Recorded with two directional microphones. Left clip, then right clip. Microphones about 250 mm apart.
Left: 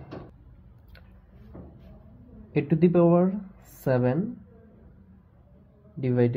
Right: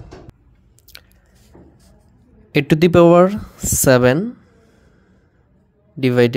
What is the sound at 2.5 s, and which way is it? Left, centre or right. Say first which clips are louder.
Speech: right 10 dB; right.